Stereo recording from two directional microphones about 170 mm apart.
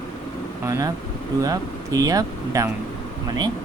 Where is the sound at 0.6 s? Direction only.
15° right (ahead or behind).